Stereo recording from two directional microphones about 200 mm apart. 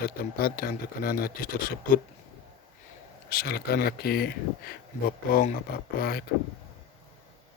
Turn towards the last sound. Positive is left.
turn(degrees=50)  # may be behind; listen again after turning